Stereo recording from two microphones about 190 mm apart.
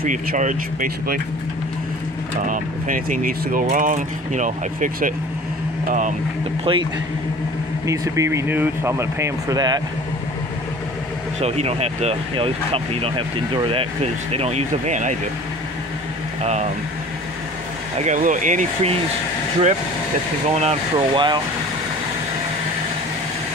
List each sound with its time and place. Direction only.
0.0 s speech: 45° right (ahead or behind)
2.4 s speech: 45° right (ahead or behind)
6.6 s speech: 25° right (ahead or behind)
11.4 s speech: 35° right (ahead or behind)
14.3 s speech: 35° right (ahead or behind)
17.9 s speech: 40° right (ahead or behind)
20.4 s speech: 35° right (ahead or behind)